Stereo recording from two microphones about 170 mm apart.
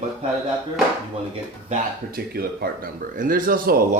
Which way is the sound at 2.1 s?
65° right (ahead or behind).